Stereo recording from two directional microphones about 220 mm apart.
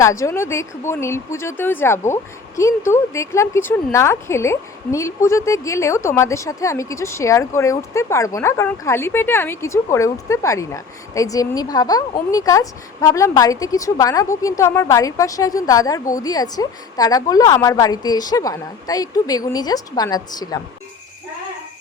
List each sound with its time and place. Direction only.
0.0 s a woman's voice: 15° left (ahead or behind)